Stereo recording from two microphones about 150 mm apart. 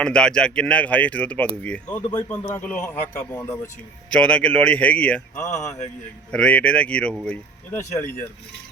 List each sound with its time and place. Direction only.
0.0 s speech: 5° left (ahead or behind)
2.1 s speech: 25° left (ahead or behind)
2.6 s speech: 10° left (ahead or behind)
4.1 s speech: 5° left (ahead or behind)
5.4 s speech: 55° left (ahead or behind)
6.3 s speech: 10° left (ahead or behind)